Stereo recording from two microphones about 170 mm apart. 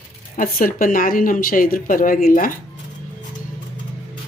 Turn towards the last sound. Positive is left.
turn(degrees=55)  # may be behind; listen again after turning